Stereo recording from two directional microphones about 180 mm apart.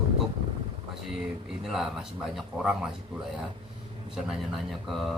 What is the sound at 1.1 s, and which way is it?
Speech, centre (ahead or behind).